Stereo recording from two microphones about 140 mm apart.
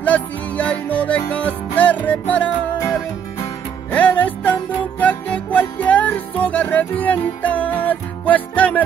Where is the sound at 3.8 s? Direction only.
10° left (ahead or behind).